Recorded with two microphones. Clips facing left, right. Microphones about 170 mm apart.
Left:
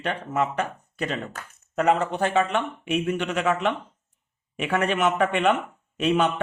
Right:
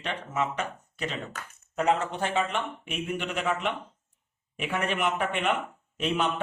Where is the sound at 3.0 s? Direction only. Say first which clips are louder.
Left 3 dB; 70° left (ahead or behind).